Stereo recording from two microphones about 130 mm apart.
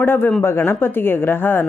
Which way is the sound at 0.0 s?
15° left (ahead or behind).